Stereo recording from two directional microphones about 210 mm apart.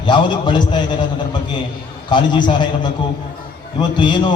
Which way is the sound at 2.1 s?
20° left (ahead or behind).